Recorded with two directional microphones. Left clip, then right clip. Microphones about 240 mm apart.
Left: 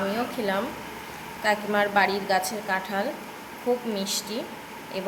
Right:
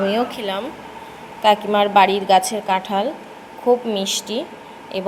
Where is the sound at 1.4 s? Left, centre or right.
Right.